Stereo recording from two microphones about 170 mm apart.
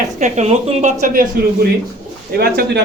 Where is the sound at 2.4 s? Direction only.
65° right (ahead or behind).